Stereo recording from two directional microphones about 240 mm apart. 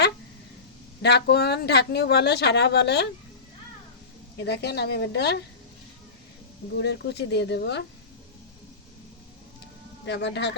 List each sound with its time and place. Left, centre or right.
1.0 s speech: left
4.4 s speech: left
6.7 s speech: left
10.1 s speech: left